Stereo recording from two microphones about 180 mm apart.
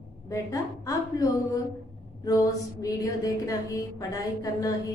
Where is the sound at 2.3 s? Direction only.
20° left (ahead or behind).